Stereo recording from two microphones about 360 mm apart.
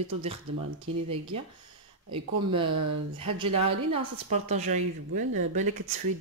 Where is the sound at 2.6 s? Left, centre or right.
Right.